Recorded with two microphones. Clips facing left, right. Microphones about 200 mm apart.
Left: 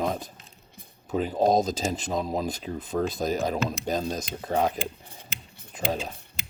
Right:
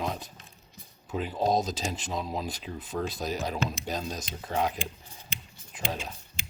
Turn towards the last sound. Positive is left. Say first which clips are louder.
# left 6 dB
turn(degrees=50)  # may be behind; listen again after turning